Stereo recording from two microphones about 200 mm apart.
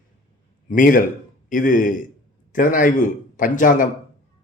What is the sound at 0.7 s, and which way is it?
Speech, 45° left (ahead or behind).